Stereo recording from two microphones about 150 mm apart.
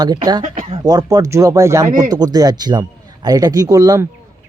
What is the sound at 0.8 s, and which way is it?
Speech, 25° right (ahead or behind).